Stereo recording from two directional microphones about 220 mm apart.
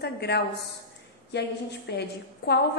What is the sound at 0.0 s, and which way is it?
A woman's voice, 45° left (ahead or behind).